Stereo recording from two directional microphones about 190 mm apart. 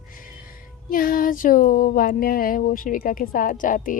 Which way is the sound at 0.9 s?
50° left (ahead or behind).